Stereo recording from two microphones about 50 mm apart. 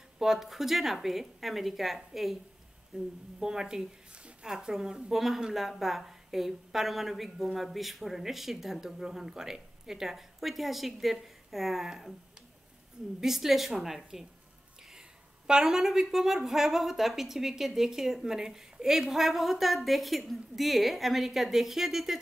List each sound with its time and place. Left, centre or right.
0.2 s speech: centre
2.9 s a woman's voice: centre
13.2 s speech: centre